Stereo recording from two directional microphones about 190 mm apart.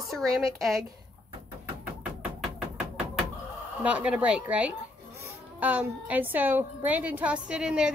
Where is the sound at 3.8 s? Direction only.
5° right (ahead or behind).